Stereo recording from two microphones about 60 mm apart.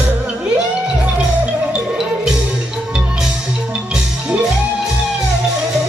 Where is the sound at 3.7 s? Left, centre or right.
Centre.